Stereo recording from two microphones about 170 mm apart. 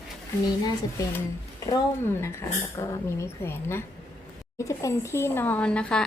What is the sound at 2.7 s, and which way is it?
A woman's voice, 15° left (ahead or behind).